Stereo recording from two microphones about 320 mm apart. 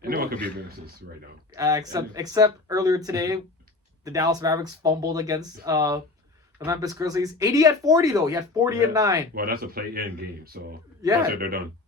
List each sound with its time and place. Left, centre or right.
0.0 s a sound: right
1.5 s speech: centre
9.3 s speech: right